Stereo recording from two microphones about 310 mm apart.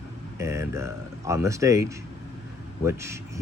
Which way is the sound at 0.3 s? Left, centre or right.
Centre.